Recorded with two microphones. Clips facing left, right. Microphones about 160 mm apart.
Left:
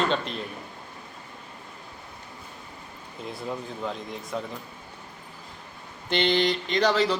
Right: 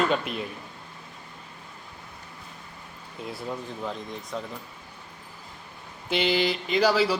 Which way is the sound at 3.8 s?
Centre (ahead or behind).